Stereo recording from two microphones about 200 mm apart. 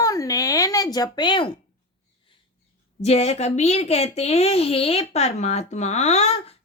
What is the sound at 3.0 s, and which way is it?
Speech, 30° left (ahead or behind).